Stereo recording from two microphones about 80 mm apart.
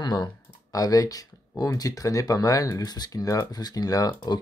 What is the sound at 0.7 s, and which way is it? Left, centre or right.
Speech, left.